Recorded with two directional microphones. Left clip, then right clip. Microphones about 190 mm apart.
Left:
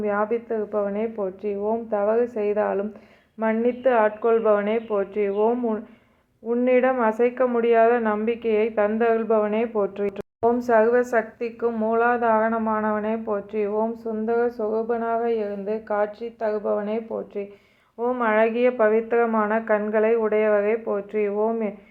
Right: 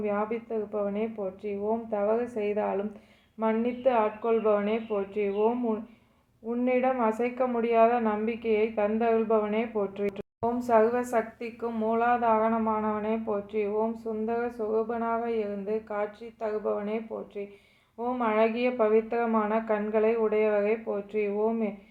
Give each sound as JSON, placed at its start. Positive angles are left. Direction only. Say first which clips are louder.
{"t": 0.0, "sound": "a woman's voice", "louder": "left 6 dB", "side_deg": 15}